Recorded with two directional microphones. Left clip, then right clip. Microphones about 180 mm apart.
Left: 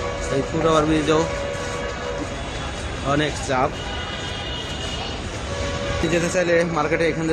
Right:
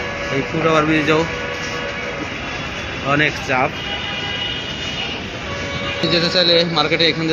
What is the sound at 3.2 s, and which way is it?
Speech, 5° left (ahead or behind).